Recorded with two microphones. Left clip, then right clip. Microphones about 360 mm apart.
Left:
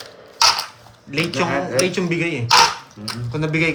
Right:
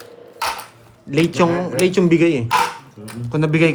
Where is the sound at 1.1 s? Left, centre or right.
Right.